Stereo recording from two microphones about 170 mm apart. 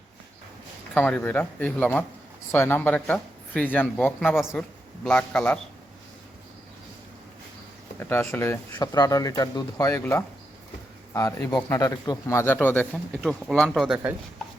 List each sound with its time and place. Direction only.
0.9 s speech: 10° left (ahead or behind)
4.4 s speech: 5° right (ahead or behind)
5.0 s speech: 5° left (ahead or behind)
7.9 s speech: 15° left (ahead or behind); by 14.0 s 5° right (ahead or behind)